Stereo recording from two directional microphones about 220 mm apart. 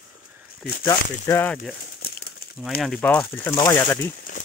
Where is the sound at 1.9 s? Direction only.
45° left (ahead or behind).